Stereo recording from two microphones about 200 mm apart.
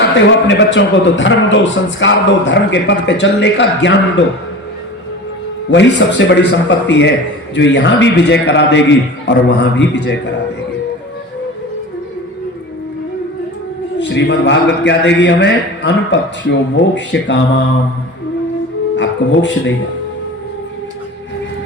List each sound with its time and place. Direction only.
0.2 s a man's voice: 65° left (ahead or behind)
5.7 s a man's voice: 60° left (ahead or behind)
14.0 s a man's voice: 60° left (ahead or behind)
18.9 s speech: 65° left (ahead or behind)